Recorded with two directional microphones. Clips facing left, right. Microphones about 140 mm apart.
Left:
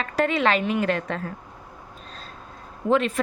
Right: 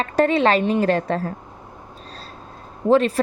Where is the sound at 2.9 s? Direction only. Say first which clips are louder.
Right 5 dB; 35° right (ahead or behind).